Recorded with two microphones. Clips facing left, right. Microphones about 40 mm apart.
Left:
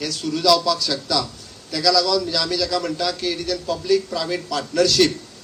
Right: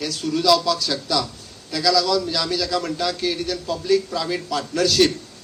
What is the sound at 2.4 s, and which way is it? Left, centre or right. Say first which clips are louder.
A man's voice: left 1 dB; centre.